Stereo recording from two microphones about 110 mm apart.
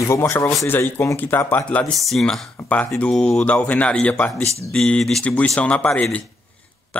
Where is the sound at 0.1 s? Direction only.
25° left (ahead or behind).